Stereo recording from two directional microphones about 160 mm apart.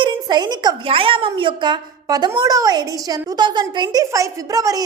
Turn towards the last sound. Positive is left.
turn(degrees=-20)  # may be behind; listen again after turning